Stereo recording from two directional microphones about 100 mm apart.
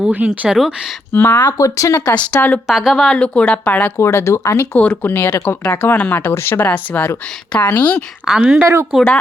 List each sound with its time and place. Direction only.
0.0 s speech: 10° right (ahead or behind)
1.1 s speech: 20° left (ahead or behind)
1.5 s speech: 35° left (ahead or behind)
2.3 s speech: 20° left (ahead or behind)
2.6 s speech: 5° right (ahead or behind); by 3.9 s 15° left (ahead or behind)
3.9 s speech: 30° left (ahead or behind)
4.8 s speech: 15° left (ahead or behind)
8.2 s speech: 5° right (ahead or behind)
8.6 s speech: 30° right (ahead or behind)